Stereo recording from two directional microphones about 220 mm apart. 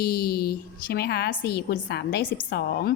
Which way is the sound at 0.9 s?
45° left (ahead or behind).